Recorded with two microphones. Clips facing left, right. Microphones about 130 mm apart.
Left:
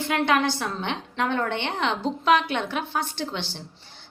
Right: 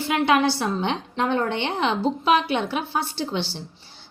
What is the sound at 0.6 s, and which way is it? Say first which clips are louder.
A woman's voice: right 5 dB; 20° right (ahead or behind).